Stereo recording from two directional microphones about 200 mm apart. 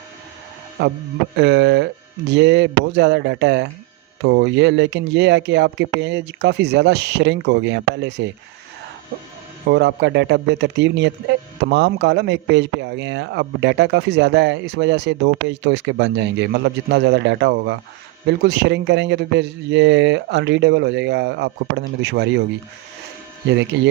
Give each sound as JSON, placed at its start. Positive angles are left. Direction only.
{"t": 1.4, "sound": "a man's voice", "side_deg": -60}
{"t": 9.6, "sound": "a man's voice", "side_deg": -55}
{"t": 23.5, "sound": "a man's voice", "side_deg": -60}